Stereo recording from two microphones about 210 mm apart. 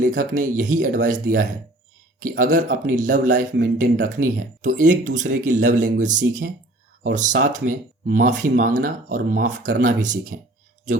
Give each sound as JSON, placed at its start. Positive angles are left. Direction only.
{"t": 0.0, "sound": "speech", "side_deg": -40}